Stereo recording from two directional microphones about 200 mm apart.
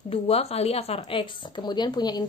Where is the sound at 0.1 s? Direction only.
30° left (ahead or behind).